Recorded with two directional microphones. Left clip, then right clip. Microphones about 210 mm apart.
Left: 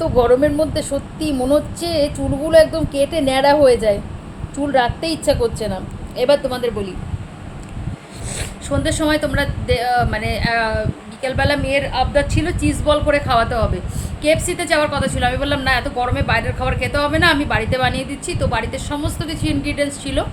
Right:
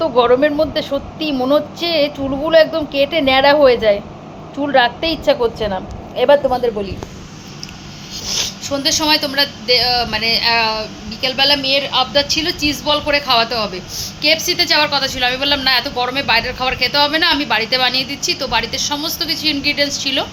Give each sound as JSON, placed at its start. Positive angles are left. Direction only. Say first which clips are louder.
{"t": 0.0, "sound": "a woman's voice", "louder": "right 2 dB", "side_deg": 10}
{"t": 8.4, "sound": "a woman's voice", "louder": "right 2 dB", "side_deg": 15}
{"t": 11.9, "sound": "speech", "louder": "right 3 dB", "side_deg": -35}
{"t": 12.8, "sound": "a woman's voice", "louder": "left 2 dB", "side_deg": 15}